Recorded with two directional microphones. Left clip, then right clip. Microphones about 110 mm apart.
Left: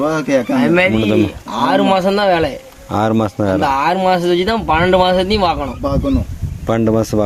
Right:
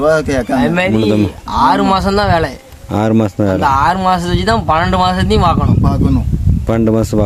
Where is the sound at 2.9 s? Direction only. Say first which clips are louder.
Right 1 dB; 60° right (ahead or behind).